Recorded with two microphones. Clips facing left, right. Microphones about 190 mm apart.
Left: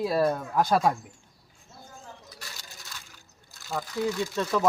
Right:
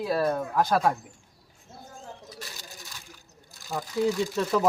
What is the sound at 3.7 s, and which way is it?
Speech, 15° right (ahead or behind).